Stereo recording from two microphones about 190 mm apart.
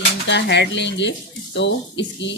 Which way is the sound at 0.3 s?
65° left (ahead or behind).